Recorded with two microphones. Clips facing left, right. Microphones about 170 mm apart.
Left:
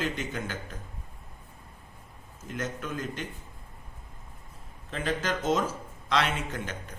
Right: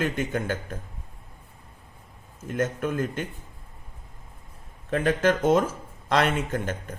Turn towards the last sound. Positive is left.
turn(degrees=-50)  # may be behind; listen again after turning